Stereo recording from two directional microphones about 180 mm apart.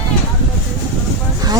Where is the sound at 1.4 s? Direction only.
20° right (ahead or behind).